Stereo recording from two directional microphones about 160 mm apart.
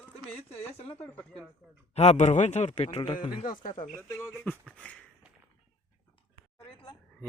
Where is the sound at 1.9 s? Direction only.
45° left (ahead or behind).